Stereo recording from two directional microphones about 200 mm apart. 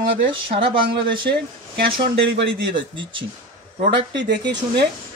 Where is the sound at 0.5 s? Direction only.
25° right (ahead or behind).